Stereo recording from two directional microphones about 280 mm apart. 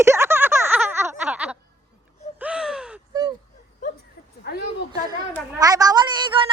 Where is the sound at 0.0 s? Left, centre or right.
Centre.